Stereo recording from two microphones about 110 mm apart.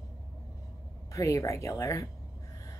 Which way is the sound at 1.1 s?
30° left (ahead or behind).